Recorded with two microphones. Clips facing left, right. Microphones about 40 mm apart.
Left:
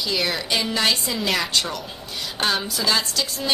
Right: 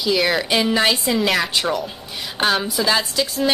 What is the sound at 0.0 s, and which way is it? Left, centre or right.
A woman's voice, centre.